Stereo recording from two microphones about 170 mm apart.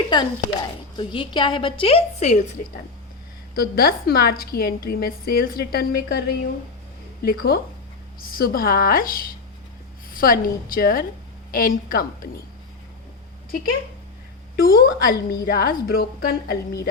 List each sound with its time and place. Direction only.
0.1 s a woman's voice: 25° left (ahead or behind); by 2.5 s 40° left (ahead or behind)
3.5 s a woman's voice: 60° left (ahead or behind)
14.5 s a woman's voice: 60° left (ahead or behind)